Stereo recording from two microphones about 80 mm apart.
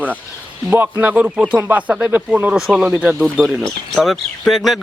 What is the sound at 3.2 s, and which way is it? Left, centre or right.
Speech, centre.